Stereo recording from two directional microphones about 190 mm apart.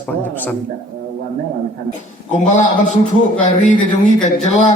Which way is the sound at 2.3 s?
40° left (ahead or behind).